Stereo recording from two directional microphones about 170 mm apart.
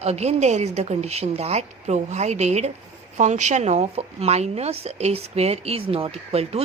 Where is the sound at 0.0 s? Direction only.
40° right (ahead or behind).